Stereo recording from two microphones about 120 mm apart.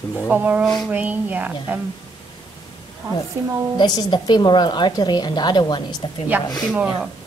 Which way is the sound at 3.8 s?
35° left (ahead or behind).